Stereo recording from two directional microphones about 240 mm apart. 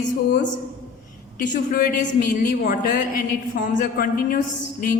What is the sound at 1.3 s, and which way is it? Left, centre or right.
A man's voice, left.